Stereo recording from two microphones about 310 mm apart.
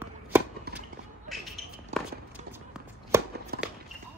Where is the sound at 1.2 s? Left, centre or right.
Centre.